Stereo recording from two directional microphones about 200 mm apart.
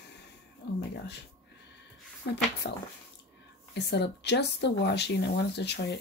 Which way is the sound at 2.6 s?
60° left (ahead or behind).